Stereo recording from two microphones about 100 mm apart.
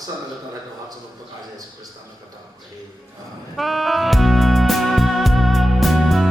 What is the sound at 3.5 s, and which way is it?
Music, centre (ahead or behind).